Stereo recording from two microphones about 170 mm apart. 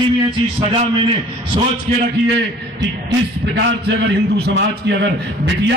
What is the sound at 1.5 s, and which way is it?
Speech, 35° right (ahead or behind).